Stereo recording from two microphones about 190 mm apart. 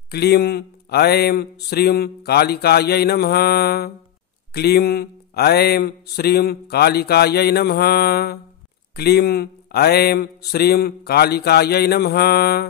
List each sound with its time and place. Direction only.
0.1 s speech: 55° left (ahead or behind)